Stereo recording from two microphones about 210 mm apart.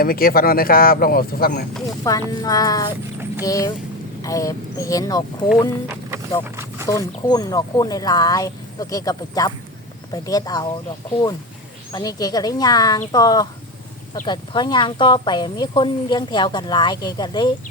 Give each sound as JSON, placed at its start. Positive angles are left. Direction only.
{"t": 0.0, "sound": "speech", "side_deg": 45}
{"t": 2.0, "sound": "speech", "side_deg": 15}
{"t": 6.8, "sound": "speech", "side_deg": 15}
{"t": 11.9, "sound": "speech", "side_deg": 20}